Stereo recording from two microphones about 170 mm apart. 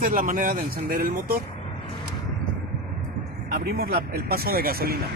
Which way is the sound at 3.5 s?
65° right (ahead or behind).